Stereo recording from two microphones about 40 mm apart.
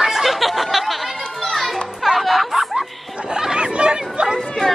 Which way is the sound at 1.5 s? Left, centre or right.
Centre.